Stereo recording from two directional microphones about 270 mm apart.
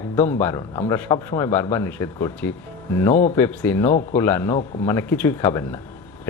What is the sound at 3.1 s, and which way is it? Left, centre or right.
Speech, left.